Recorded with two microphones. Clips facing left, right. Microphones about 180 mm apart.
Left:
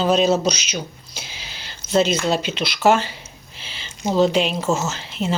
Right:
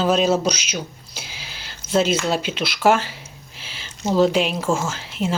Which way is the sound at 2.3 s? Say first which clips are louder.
Left 1 dB; 5° right (ahead or behind).